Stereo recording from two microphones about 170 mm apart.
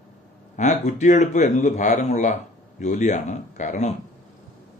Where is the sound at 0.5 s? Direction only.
45° left (ahead or behind).